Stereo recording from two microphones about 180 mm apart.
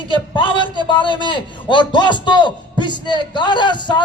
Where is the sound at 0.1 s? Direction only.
25° left (ahead or behind).